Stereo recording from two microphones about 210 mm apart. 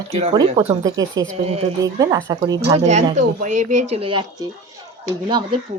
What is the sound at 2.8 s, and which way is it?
Speech, 35° right (ahead or behind).